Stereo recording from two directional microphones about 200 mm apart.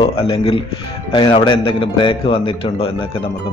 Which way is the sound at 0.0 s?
25° left (ahead or behind).